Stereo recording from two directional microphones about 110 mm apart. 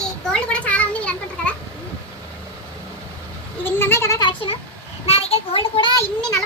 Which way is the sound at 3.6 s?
20° left (ahead or behind).